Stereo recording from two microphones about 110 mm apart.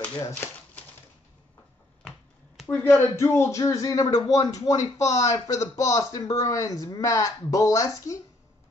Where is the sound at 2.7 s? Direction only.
25° left (ahead or behind).